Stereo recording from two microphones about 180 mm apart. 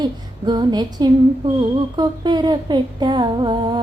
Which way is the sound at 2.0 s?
25° right (ahead or behind).